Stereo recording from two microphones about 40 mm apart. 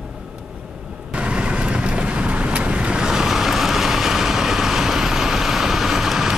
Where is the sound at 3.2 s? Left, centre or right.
Centre.